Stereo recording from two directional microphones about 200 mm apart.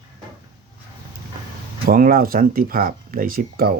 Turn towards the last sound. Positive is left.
turn(degrees=-50)  # may be behind; listen again after turning